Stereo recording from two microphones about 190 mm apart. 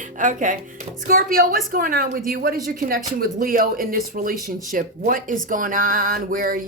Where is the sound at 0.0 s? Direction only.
40° right (ahead or behind).